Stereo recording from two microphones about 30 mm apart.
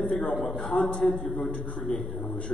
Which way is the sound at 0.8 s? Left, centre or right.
Left.